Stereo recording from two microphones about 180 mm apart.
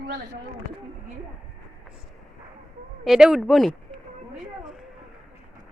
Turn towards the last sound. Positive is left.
turn(degrees=0)  # may be behind; listen again after turning